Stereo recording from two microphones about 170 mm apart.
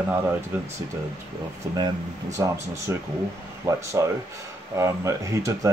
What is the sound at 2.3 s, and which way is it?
Speech, 15° right (ahead or behind).